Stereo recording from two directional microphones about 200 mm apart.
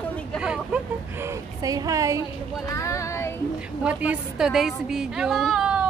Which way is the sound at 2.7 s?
15° left (ahead or behind).